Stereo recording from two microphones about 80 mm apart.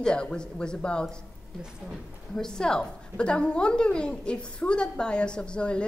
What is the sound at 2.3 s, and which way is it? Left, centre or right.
A woman's voice, centre.